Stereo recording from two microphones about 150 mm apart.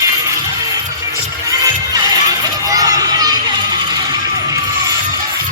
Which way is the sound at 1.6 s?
25° right (ahead or behind).